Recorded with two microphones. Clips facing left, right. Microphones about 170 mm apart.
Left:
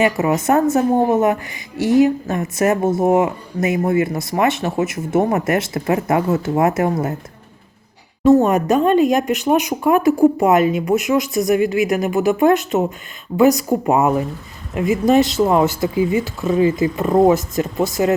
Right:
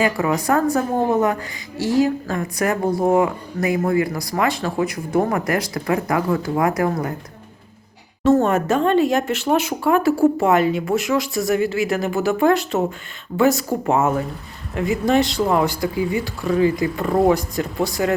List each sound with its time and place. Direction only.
0.0 s a woman's voice: 20° left (ahead or behind)
8.2 s a woman's voice: 15° left (ahead or behind)